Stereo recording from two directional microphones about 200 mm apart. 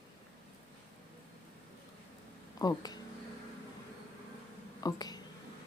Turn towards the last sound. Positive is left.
turn(degrees=20)  # may be behind; listen again after turning